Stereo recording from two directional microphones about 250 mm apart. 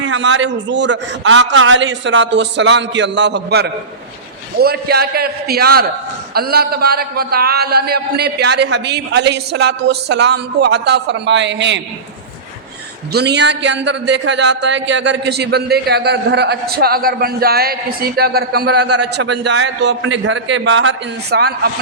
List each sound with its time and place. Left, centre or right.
0.0 s a man's voice: right
13.1 s speech: right